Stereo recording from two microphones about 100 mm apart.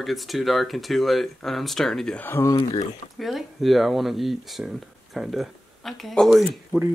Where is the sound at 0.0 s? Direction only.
Centre (ahead or behind).